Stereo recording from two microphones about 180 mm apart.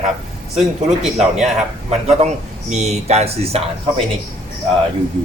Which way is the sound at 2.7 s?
40° right (ahead or behind).